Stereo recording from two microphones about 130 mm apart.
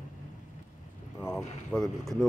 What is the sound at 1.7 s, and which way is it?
Speech, 5° left (ahead or behind).